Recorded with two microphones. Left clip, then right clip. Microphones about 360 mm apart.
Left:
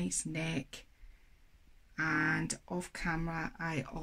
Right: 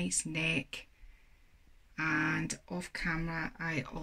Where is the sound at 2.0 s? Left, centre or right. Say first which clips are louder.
Even; centre.